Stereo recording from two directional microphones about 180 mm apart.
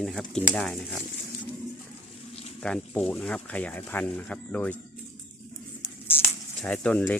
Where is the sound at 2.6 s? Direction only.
5° left (ahead or behind).